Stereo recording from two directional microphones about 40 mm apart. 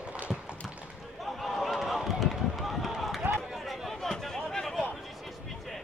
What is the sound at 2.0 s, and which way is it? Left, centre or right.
Run, centre.